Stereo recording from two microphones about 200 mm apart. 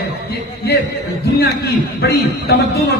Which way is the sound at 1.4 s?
55° left (ahead or behind).